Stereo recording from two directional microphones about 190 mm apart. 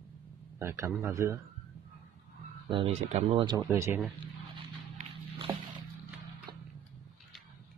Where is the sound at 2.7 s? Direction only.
35° right (ahead or behind).